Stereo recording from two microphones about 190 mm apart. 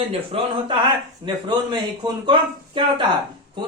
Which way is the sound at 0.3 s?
30° right (ahead or behind).